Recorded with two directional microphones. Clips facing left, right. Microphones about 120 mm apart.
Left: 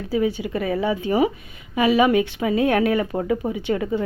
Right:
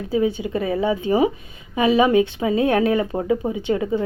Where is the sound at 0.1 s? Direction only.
20° right (ahead or behind).